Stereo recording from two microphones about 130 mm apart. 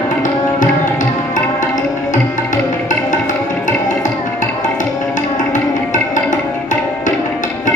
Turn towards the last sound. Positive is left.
turn(degrees=75)  # may be behind; listen again after turning